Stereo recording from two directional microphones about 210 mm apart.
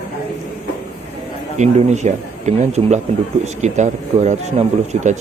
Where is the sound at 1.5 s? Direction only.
35° right (ahead or behind).